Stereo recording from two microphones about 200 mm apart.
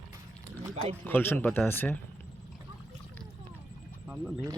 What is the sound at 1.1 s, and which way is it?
Speech, 10° left (ahead or behind).